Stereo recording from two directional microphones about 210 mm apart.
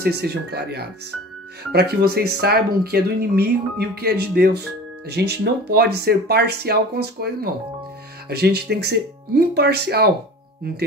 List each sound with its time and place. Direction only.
0.0 s speech: 50° right (ahead or behind)
8.3 s speech: 50° right (ahead or behind)